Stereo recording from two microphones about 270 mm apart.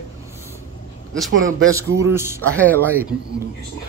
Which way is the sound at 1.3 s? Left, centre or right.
Right.